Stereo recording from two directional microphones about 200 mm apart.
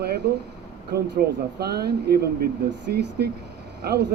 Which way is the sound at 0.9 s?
55° right (ahead or behind).